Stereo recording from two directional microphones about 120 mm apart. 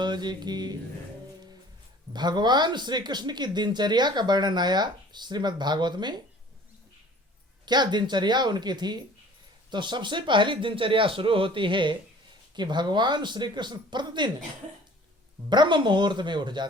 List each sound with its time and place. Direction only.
0.0 s speech: 35° right (ahead or behind)
2.1 s speech: 35° right (ahead or behind)
7.6 s speech: 35° right (ahead or behind)
15.4 s speech: 40° right (ahead or behind)